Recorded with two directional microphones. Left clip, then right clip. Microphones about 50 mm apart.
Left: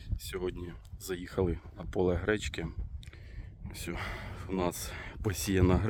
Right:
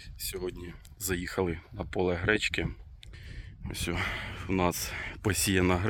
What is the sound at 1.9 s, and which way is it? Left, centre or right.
Speech, left.